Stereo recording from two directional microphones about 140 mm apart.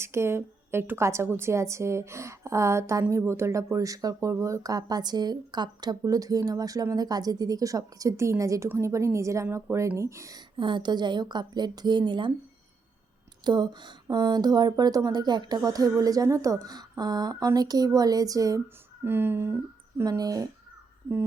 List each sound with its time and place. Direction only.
0.0 s a woman's voice: 20° right (ahead or behind)
10.6 s a woman's voice: 35° right (ahead or behind)
13.4 s a woman's voice: 30° right (ahead or behind); by 19.5 s 15° right (ahead or behind)
20.0 s a woman's voice: 25° right (ahead or behind)